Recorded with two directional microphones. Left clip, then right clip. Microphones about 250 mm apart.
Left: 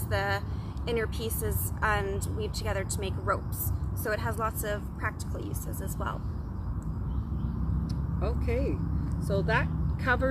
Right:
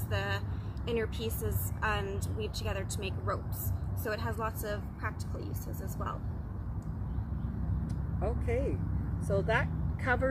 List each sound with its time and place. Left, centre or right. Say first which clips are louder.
0.1 s vehicle: left 6 dB; centre
0.8 s speech: left 3 dB; centre
8.2 s speech: left 1 dB; centre